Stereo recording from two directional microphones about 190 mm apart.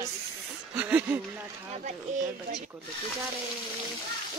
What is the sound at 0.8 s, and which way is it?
Speech, 5° right (ahead or behind).